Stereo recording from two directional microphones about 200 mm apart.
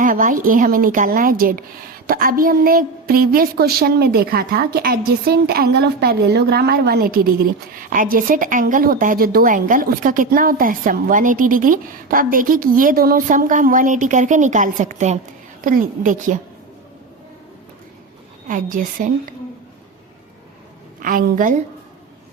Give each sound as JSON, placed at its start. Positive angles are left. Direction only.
{"t": 0.0, "sound": "a woman's voice", "side_deg": -45}
{"t": 18.4, "sound": "a woman's voice", "side_deg": -40}
{"t": 21.0, "sound": "a woman's voice", "side_deg": -45}